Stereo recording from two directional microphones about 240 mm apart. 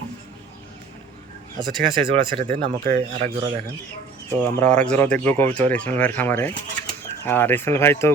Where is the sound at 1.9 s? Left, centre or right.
Right.